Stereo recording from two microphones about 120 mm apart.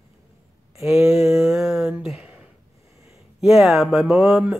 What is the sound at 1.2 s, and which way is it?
Speech, 5° right (ahead or behind).